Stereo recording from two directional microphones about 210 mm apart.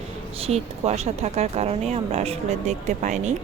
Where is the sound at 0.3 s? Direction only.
30° right (ahead or behind).